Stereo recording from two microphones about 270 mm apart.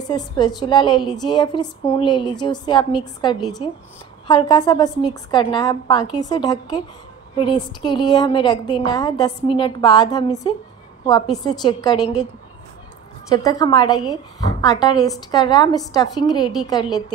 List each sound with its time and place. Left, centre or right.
0.0 s a woman's voice: centre
13.3 s a woman's voice: centre